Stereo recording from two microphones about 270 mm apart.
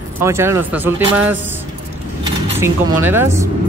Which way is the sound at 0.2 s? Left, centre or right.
Centre.